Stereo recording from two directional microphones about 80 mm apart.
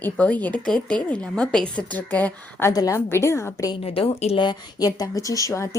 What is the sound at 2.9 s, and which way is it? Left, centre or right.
Speech, left.